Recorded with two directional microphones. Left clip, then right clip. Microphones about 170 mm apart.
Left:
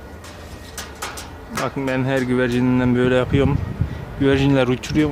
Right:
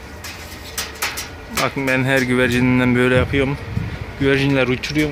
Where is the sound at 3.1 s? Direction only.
15° left (ahead or behind).